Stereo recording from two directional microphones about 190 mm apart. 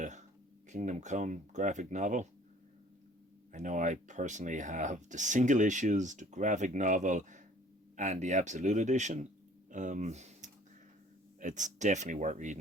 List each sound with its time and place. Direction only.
0.0 s a sound: 40° right (ahead or behind)
0.7 s speech: 40° right (ahead or behind)
3.5 s speech: 40° right (ahead or behind)